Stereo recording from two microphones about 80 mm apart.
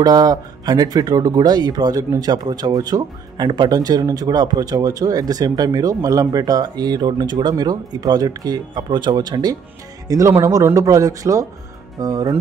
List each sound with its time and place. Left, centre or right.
0.0 s speech: right
10.0 s speech: right